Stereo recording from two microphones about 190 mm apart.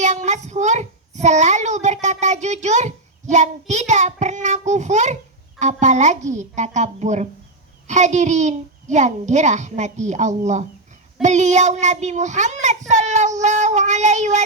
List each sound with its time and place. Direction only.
0.0 s a child's voice: 40° right (ahead or behind)